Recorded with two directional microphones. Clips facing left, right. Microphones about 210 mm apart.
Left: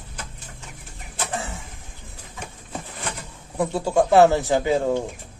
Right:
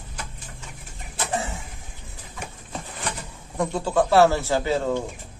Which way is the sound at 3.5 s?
10° left (ahead or behind).